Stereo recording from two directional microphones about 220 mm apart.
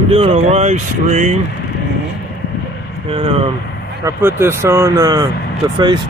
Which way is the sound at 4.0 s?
10° right (ahead or behind).